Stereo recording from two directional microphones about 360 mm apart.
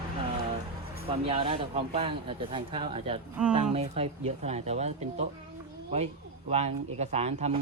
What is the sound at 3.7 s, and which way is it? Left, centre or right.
Speech, centre.